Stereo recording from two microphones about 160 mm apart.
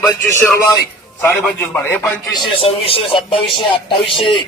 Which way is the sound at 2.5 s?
35° left (ahead or behind).